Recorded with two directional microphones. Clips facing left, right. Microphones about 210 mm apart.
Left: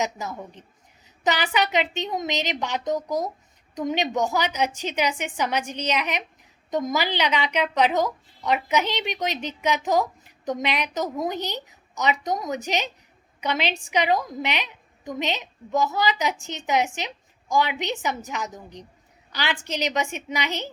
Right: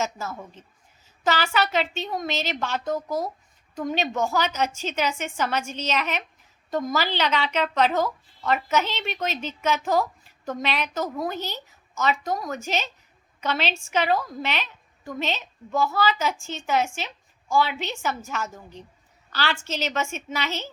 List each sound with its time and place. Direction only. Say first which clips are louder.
0.0 s a woman's voice: left 1 dB; 15° left (ahead or behind)